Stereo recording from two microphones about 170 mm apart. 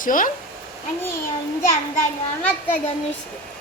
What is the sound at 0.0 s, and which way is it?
Speech, 55° left (ahead or behind).